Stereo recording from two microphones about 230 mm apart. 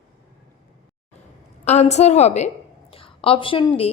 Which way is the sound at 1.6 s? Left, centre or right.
Left.